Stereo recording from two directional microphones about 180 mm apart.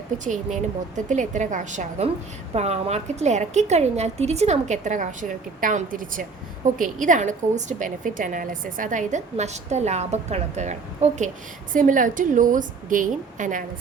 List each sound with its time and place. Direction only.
0.3 s a woman's voice: 45° right (ahead or behind)